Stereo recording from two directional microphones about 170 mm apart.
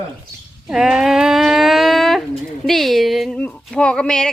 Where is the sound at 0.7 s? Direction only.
5° right (ahead or behind).